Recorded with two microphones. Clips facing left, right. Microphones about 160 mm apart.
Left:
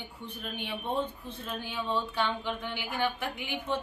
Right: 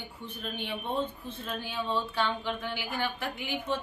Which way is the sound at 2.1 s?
15° left (ahead or behind).